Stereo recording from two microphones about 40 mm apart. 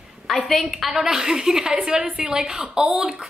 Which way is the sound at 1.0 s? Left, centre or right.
Centre.